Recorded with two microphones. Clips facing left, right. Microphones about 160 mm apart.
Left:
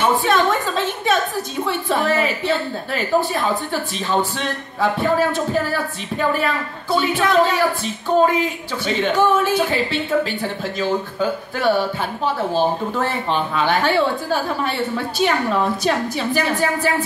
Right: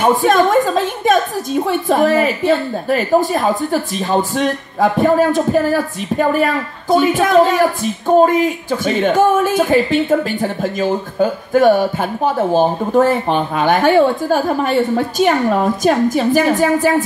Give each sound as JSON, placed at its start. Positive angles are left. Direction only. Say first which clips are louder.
{"t": 0.0, "sound": "a woman's voice", "louder": "right 5 dB", "side_deg": -45}